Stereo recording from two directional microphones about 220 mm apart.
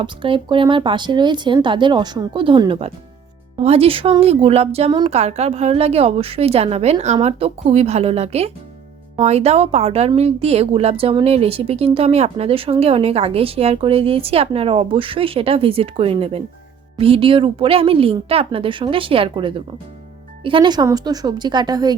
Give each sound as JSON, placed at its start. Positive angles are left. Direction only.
{"t": 0.0, "sound": "speech", "side_deg": -25}